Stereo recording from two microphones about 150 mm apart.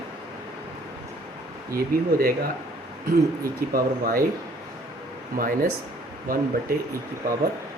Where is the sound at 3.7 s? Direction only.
70° right (ahead or behind).